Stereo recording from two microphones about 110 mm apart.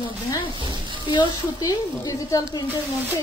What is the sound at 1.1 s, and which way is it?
Speech, 45° left (ahead or behind).